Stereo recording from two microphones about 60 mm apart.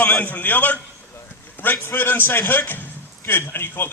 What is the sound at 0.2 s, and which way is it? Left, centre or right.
A man's voice, left.